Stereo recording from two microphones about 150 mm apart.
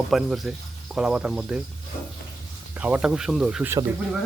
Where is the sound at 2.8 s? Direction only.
10° right (ahead or behind).